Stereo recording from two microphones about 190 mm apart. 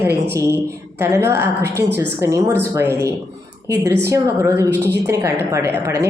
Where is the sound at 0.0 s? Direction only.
15° right (ahead or behind).